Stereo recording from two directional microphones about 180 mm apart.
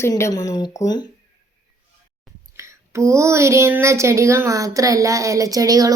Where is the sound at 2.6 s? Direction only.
15° right (ahead or behind).